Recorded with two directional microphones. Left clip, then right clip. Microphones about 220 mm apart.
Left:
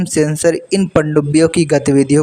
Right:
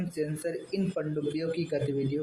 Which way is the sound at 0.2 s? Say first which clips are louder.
Left 19 dB; 50° left (ahead or behind).